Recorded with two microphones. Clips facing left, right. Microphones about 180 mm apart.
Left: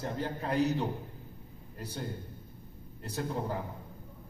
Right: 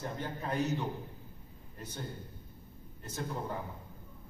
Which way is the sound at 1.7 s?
35° left (ahead or behind).